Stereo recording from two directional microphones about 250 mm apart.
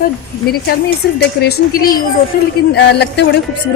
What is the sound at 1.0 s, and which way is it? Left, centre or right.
A woman's voice, left.